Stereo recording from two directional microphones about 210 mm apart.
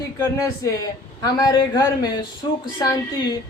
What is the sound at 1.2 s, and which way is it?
Speech, 15° left (ahead or behind).